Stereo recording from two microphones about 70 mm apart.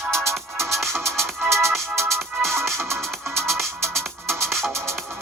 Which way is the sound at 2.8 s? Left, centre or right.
Right.